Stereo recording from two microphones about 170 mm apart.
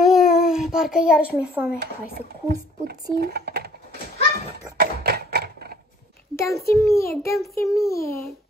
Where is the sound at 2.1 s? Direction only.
65° right (ahead or behind).